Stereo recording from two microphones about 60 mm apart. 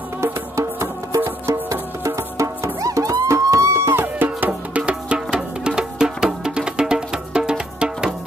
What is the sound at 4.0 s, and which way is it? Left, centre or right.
Music, right.